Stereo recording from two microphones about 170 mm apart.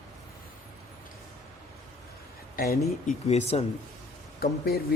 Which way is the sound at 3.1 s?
40° left (ahead or behind).